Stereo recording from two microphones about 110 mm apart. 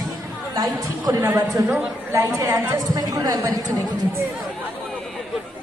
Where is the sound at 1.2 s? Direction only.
25° right (ahead or behind).